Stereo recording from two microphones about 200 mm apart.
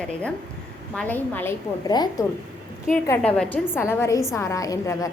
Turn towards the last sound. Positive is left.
turn(degrees=15)  # may be behind; listen again after turning